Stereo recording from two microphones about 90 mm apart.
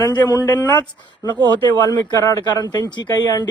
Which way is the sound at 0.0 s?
45° left (ahead or behind).